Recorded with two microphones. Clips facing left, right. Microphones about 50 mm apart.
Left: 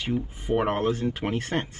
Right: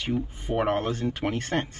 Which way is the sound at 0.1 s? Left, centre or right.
Centre.